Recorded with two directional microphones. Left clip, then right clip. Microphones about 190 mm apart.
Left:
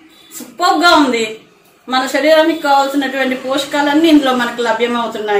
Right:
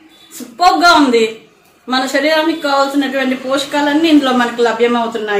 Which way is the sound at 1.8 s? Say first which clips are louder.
Left 2 dB; 20° right (ahead or behind).